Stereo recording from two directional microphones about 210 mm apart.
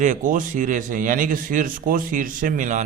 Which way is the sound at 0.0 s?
35° right (ahead or behind).